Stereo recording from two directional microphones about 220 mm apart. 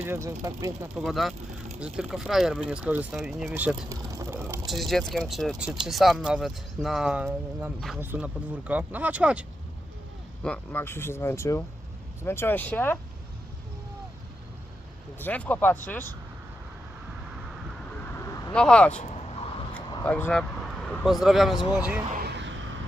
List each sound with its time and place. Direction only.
0.0 s speech: 10° right (ahead or behind)
0.9 s speech: centre (ahead or behind)
3.8 s vehicle: 15° right (ahead or behind); by 5.2 s centre (ahead or behind)
5.3 s speech: centre (ahead or behind)
10.4 s speech: 5° left (ahead or behind)
15.2 s speech: 5° left (ahead or behind)
18.1 s vehicle: 15° left (ahead or behind)
18.5 s speech: 5° left (ahead or behind)
19.7 s a sound: 5° left (ahead or behind)
21.0 s speech: centre (ahead or behind)
22.2 s a sound: 50° right (ahead or behind)